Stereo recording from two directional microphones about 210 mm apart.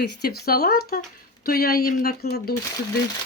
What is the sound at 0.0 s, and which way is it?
A woman's voice, 50° left (ahead or behind).